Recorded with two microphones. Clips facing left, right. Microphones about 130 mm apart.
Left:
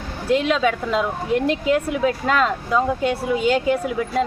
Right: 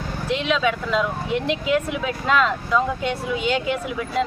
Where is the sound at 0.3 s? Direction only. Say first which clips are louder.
Left 3 dB; 40° left (ahead or behind).